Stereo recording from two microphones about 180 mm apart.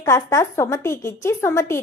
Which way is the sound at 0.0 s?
15° left (ahead or behind).